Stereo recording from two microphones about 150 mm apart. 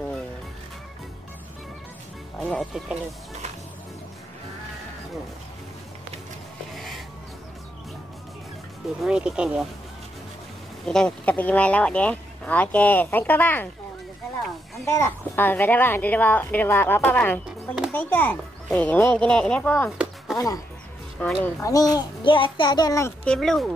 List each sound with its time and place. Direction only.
2.4 s speech: centre (ahead or behind)
9.0 s speech: 5° right (ahead or behind)
10.9 s speech: 5° left (ahead or behind)
14.9 s speech: 15° left (ahead or behind)
17.5 s a sound: 5° right (ahead or behind)
17.9 s speech: 10° left (ahead or behind)
20.3 s a child's voice: 25° left (ahead or behind)
23.2 s speech: 5° left (ahead or behind)